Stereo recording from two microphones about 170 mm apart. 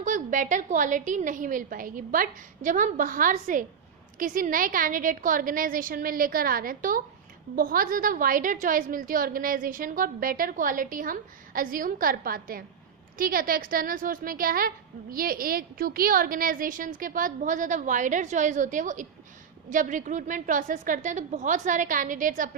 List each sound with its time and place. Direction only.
0.0 s a woman's voice: 50° right (ahead or behind)